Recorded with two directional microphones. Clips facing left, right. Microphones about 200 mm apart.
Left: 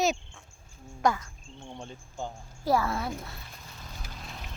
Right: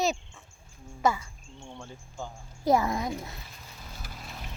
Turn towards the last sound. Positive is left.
turn(degrees=-15)  # may be behind; listen again after turning